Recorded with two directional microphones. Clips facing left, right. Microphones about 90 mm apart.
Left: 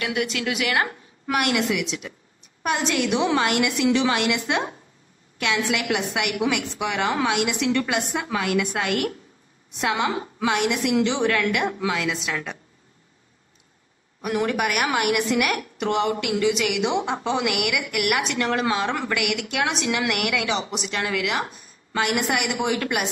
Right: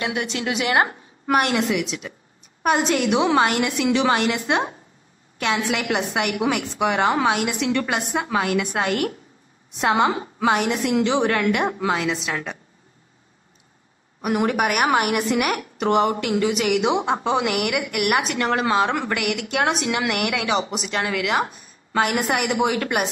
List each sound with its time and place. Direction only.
0.0 s a woman's voice: 30° right (ahead or behind)
14.5 s a woman's voice: 45° right (ahead or behind)
22.8 s a woman's voice: 40° right (ahead or behind)